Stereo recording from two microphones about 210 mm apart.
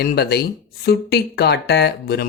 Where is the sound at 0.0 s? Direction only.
50° left (ahead or behind).